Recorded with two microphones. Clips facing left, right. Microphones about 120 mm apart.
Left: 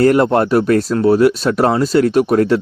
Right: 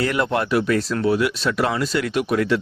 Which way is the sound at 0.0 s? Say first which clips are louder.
Left 9 dB; 45° left (ahead or behind).